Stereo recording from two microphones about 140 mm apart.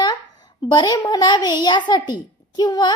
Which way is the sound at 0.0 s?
30° left (ahead or behind).